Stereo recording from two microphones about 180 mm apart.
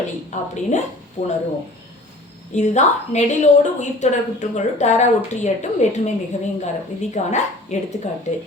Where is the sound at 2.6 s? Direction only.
40° left (ahead or behind).